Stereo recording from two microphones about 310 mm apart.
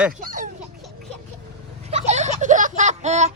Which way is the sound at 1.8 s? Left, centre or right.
Right.